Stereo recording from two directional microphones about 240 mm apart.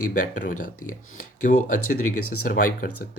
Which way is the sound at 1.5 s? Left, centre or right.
Left.